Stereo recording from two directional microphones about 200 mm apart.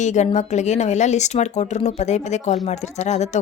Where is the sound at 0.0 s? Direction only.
35° left (ahead or behind).